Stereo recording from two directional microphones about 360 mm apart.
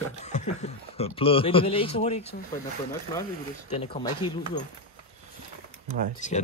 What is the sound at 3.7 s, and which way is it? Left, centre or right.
Speech, centre.